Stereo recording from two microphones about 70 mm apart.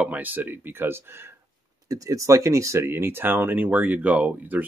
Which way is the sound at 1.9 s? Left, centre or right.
Right.